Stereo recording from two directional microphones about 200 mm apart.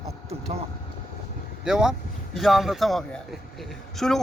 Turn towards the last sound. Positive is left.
turn(degrees=5)  # may be behind; listen again after turning